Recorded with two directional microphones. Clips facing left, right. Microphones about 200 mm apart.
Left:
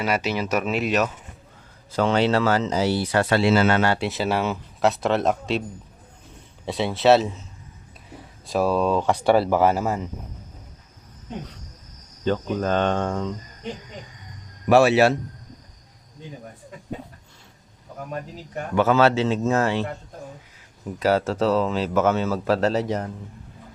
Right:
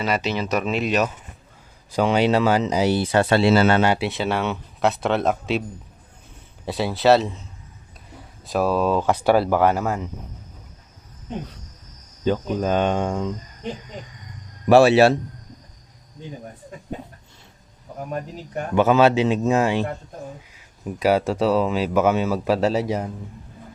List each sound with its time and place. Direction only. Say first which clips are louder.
0.0 s speech: right 1 dB; 10° left (ahead or behind)
1.9 s speech: right 1 dB; 15° right (ahead or behind); by 3.8 s 35° right (ahead or behind)
3.9 s speech: even; centre (ahead or behind)
6.7 s speech: even; centre (ahead or behind)
8.4 s speech: right 1 dB; centre (ahead or behind)
12.2 s speech: right 1 dB; 10° right (ahead or behind)
14.7 s a man's voice: right 3 dB; 30° right (ahead or behind)
18.7 s speech: right 2 dB; 20° right (ahead or behind)
21.0 s speech: right 1 dB; 15° right (ahead or behind)